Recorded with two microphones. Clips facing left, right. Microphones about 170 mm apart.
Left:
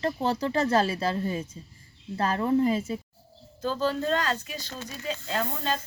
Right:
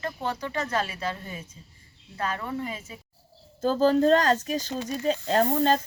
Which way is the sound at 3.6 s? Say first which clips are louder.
Right 7 dB; 45° right (ahead or behind).